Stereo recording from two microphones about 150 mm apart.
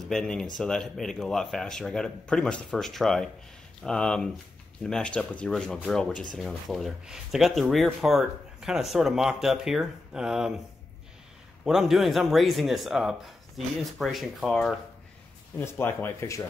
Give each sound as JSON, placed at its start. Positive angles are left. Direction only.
{"t": 0.0, "sound": "speech", "side_deg": 5}
{"t": 11.6, "sound": "speech", "side_deg": 0}
{"t": 15.6, "sound": "speech", "side_deg": 15}